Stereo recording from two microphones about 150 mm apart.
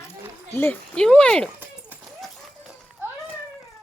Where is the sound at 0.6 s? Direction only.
10° left (ahead or behind).